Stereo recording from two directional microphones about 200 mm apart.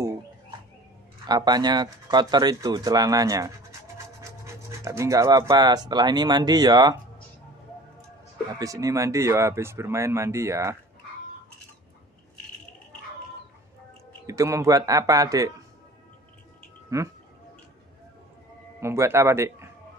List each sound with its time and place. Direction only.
1.2 s speech: 20° right (ahead or behind)
8.5 s speech: 15° right (ahead or behind)
14.2 s speech: 15° right (ahead or behind)
16.9 s speech: 15° right (ahead or behind)
18.8 s speech: 15° right (ahead or behind)